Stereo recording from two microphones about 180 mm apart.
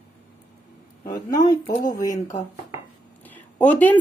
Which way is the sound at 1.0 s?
50° left (ahead or behind).